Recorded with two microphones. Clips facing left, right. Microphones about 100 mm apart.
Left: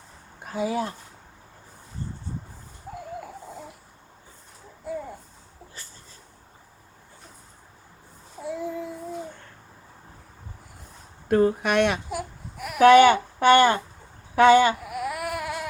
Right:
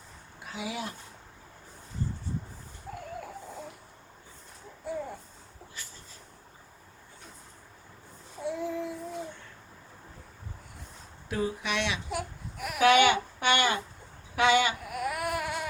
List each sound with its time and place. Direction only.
0.4 s speech: 40° left (ahead or behind)
8.4 s child singing: centre (ahead or behind)
11.3 s speech: 50° left (ahead or behind)
12.1 s baby cry: centre (ahead or behind)
12.8 s speech: 45° left (ahead or behind)
14.8 s baby cry: centre (ahead or behind)